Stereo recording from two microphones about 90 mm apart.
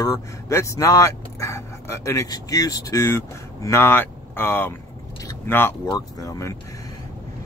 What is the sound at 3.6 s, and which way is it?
Speech, 30° left (ahead or behind).